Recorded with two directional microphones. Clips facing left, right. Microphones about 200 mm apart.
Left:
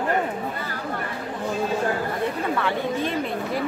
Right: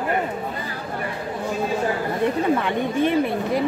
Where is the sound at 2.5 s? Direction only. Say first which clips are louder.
Right 3 dB; 20° right (ahead or behind).